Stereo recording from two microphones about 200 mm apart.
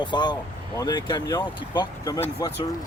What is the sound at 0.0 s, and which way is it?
Speech, 20° left (ahead or behind).